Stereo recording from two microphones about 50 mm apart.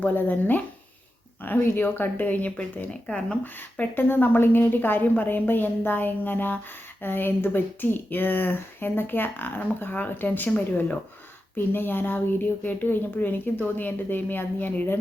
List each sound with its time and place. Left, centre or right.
0.0 s a woman's voice: left
2.9 s speech: centre
3.4 s a woman's voice: left
11.5 s a woman's voice: left